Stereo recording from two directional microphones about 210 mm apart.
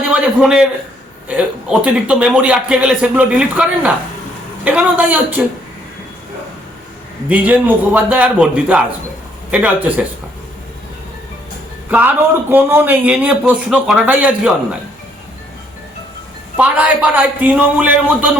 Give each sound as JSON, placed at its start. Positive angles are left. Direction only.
{"t": 0.1, "sound": "a man's voice", "side_deg": -5}
{"t": 7.3, "sound": "speech", "side_deg": -5}
{"t": 11.9, "sound": "speech", "side_deg": -10}
{"t": 16.6, "sound": "speech", "side_deg": -5}